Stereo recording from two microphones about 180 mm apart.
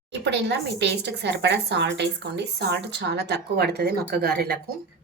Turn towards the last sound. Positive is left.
turn(degrees=-60)  # may be behind; listen again after turning